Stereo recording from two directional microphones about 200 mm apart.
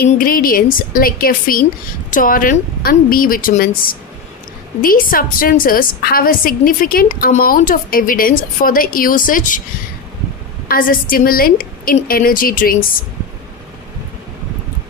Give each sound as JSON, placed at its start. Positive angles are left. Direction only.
{"t": 0.2, "sound": "a woman's voice", "side_deg": 45}
{"t": 4.8, "sound": "a woman's voice", "side_deg": 45}
{"t": 10.7, "sound": "a woman's voice", "side_deg": 45}